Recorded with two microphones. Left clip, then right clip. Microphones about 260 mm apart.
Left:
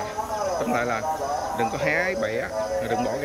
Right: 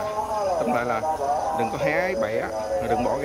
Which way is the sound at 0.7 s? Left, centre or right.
Centre.